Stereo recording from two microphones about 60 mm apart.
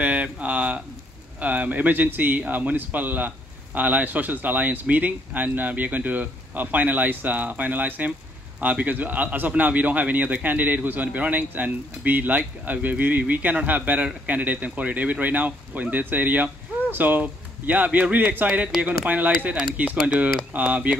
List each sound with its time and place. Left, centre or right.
0.0 s a man's voice: right